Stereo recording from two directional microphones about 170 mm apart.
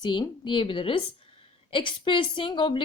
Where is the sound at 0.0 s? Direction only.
25° left (ahead or behind).